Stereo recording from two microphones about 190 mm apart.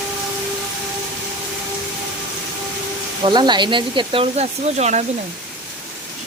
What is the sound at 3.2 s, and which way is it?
Speech, 25° right (ahead or behind).